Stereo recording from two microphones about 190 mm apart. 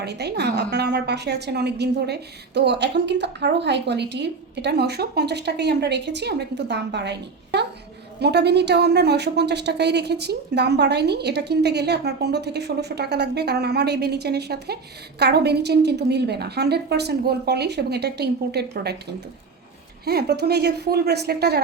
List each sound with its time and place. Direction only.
0.0 s a woman's voice: 60° right (ahead or behind)
20.1 s a woman's voice: 55° right (ahead or behind)